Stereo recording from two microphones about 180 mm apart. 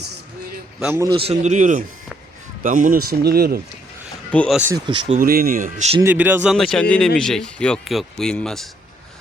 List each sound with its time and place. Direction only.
0.8 s a man's voice: 10° right (ahead or behind)
1.0 s speech: 30° right (ahead or behind); by 3.6 s 60° right (ahead or behind)
4.3 s speech: 5° left (ahead or behind)
4.5 s a man's voice: 10° right (ahead or behind)
4.9 s speech: 30° right (ahead or behind)
5.2 s speech: 55° right (ahead or behind)
6.0 s speech: 10° right (ahead or behind)